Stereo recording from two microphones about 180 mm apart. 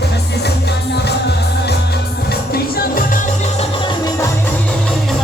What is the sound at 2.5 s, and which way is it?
Music, 55° left (ahead or behind).